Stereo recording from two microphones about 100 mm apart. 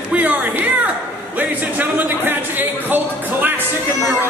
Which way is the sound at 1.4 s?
20° right (ahead or behind).